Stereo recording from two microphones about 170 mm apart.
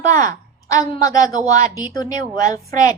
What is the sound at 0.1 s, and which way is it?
A woman's voice, 20° left (ahead or behind).